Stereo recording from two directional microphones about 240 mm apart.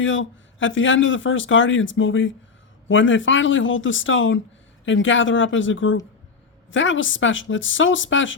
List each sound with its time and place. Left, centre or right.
0.0 s a man's voice: left